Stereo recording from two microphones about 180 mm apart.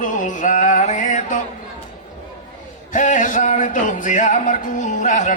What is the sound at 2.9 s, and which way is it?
Music, 45° left (ahead or behind).